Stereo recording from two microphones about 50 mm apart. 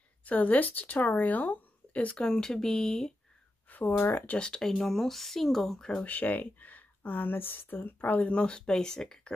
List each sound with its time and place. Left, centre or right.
0.2 s speech: left
2.1 s speech: centre
3.7 s speech: left
4.4 s speech: centre
6.0 s speech: left
8.4 s speech: centre